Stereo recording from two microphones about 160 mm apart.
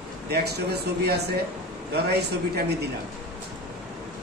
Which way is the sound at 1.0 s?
90° right.